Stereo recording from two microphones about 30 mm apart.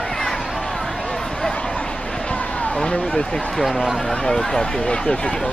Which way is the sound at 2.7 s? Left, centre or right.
Left.